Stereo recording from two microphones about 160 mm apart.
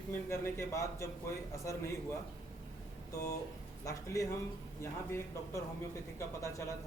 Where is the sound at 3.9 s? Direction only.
20° left (ahead or behind).